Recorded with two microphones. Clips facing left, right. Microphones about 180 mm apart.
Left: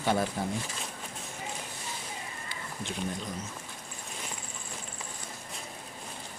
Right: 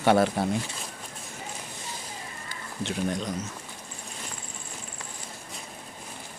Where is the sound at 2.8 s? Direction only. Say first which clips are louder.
Right 7 dB; 80° right.